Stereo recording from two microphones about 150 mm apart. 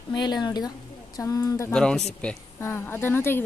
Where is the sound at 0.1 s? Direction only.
30° left (ahead or behind).